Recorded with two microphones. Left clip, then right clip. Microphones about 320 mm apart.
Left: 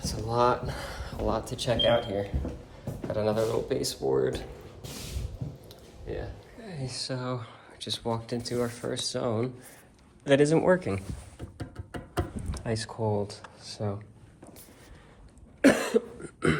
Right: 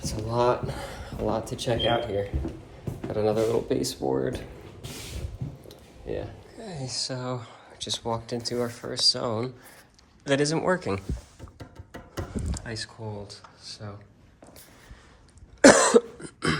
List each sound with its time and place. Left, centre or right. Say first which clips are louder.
0.3 s speech: right 1 dB; centre
6.6 s speech: right 4 dB; centre
12.1 s a sound: left 1 dB; centre
15.6 s cough: right 7 dB; centre
16.2 s cough: even; centre